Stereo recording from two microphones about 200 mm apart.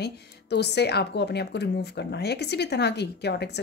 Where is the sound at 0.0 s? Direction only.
55° left (ahead or behind).